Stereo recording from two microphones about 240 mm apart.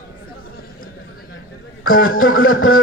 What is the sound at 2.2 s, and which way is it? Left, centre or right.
Speech, left.